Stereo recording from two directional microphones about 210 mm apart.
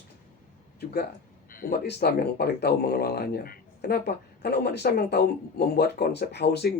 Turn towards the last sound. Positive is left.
turn(degrees=50)  # may be behind; listen again after turning